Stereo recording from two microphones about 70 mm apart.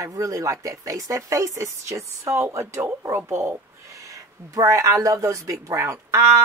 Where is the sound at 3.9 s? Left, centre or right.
Right.